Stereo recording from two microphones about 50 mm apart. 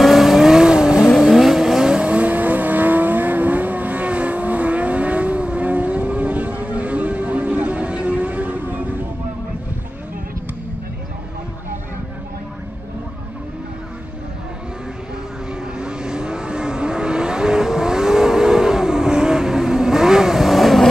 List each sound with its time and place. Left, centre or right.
0.0 s vehicle: centre
1.1 s vehicle: centre; by 8.8 s right
15.8 s vehicle: centre